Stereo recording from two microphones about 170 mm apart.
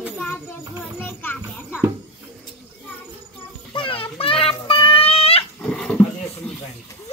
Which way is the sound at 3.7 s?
30° left (ahead or behind).